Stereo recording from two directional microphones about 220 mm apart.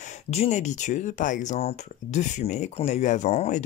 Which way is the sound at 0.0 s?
30° left (ahead or behind).